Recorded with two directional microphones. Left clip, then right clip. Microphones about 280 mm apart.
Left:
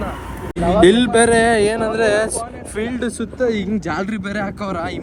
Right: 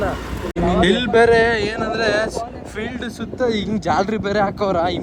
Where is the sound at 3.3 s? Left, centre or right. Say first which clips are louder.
Even; centre.